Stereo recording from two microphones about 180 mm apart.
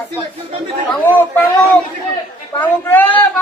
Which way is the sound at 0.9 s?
10° left (ahead or behind).